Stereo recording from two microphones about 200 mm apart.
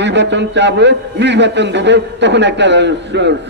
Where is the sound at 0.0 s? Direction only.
60° right (ahead or behind).